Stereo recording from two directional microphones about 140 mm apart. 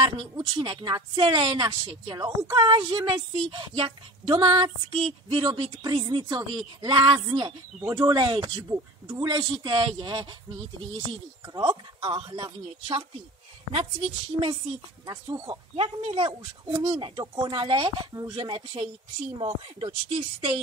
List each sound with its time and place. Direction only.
0.0 s a woman's voice: 35° right (ahead or behind)
15.0 s a woman's voice: 30° right (ahead or behind)